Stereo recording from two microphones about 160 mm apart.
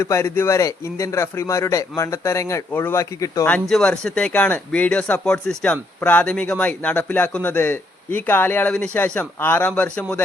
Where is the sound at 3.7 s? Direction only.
5° left (ahead or behind).